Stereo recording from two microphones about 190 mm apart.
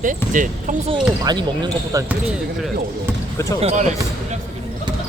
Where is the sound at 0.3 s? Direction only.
45° right (ahead or behind).